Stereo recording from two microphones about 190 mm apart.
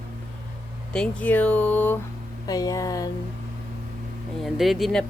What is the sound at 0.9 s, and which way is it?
Speech, 5° left (ahead or behind).